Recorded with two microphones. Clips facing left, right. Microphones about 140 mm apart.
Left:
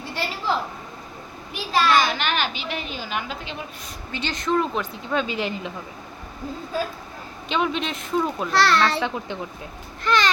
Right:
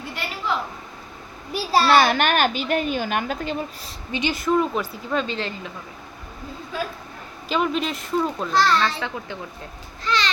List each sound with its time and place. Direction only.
1.5 s a child's voice: 35° right (ahead or behind)
1.9 s a woman's voice: 55° right (ahead or behind)
4.1 s a woman's voice: 10° right (ahead or behind)
5.2 s a woman's voice: 10° left (ahead or behind)
7.4 s a woman's voice: 5° right (ahead or behind)
8.5 s a child's voice: 70° left (ahead or behind)
9.0 s a child's voice: 20° left (ahead or behind)
10.0 s a sound: 55° left (ahead or behind)